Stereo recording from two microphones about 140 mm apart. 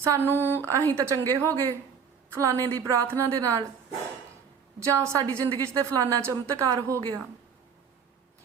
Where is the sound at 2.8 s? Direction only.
25° right (ahead or behind).